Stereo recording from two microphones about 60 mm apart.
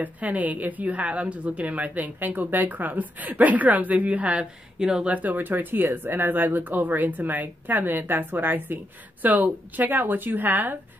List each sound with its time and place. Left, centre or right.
0.0 s a woman's voice: right
5.1 s speech: right